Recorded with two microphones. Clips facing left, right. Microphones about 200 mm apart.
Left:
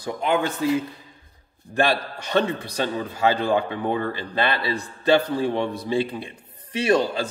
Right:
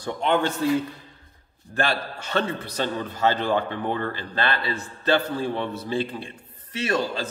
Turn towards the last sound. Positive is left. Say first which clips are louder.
# left 5 dB
turn(degrees=15)  # may be behind; listen again after turning